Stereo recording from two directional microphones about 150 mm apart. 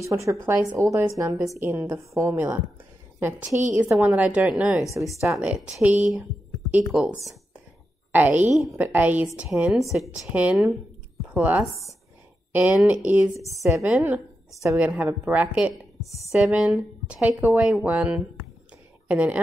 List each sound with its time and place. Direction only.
0.0 s a woman's voice: 20° right (ahead or behind)
13.4 s a woman's voice: 20° right (ahead or behind)
13.8 s speech: 10° right (ahead or behind)
14.5 s a woman's voice: 20° right (ahead or behind)
14.8 s speech: 10° right (ahead or behind)